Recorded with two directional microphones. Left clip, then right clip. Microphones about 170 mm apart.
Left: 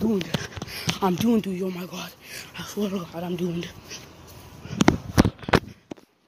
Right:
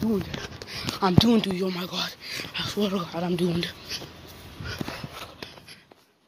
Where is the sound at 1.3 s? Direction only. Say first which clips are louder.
Right 1 dB; 10° left (ahead or behind).